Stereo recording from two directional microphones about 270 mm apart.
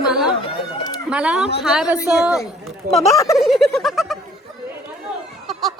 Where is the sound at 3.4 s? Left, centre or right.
Centre.